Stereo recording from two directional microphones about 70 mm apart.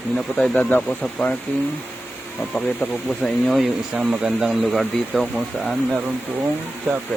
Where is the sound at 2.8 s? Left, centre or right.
Left.